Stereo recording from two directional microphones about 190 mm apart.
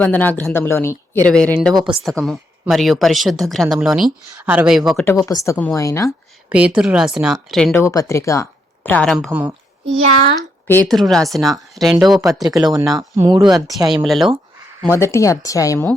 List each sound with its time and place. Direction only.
0.0 s a woman's voice: 10° left (ahead or behind)
5.0 s speech: 15° left (ahead or behind)
6.5 s a woman's voice: 5° right (ahead or behind)
7.8 s speech: 15° left (ahead or behind)
9.1 s a woman's voice: 5° right (ahead or behind)
10.7 s a woman's voice: 5° left (ahead or behind)
12.9 s speech: 20° right (ahead or behind)
13.9 s a woman's voice: centre (ahead or behind)
14.9 s speech: 15° left (ahead or behind)